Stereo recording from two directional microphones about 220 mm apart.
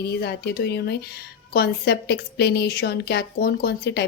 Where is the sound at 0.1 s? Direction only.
45° left (ahead or behind).